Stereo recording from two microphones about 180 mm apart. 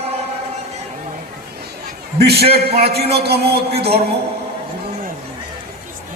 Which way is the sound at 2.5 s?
60° right (ahead or behind).